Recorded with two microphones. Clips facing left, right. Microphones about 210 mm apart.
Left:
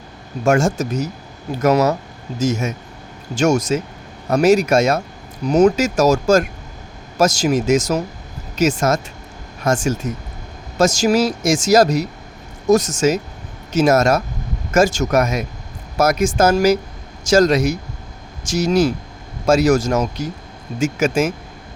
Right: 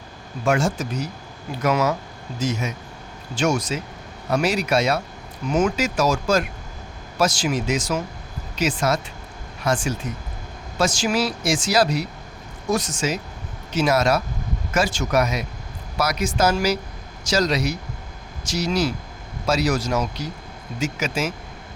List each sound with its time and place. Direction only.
0.4 s speech: 45° left (ahead or behind)